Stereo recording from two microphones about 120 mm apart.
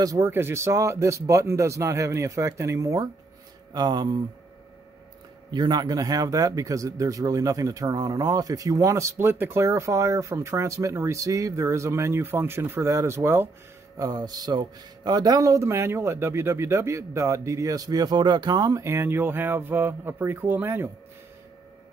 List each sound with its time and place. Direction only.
0.0 s speech: 25° right (ahead or behind)
3.7 s speech: 35° right (ahead or behind)
5.5 s speech: 35° right (ahead or behind)
13.9 s speech: 30° right (ahead or behind)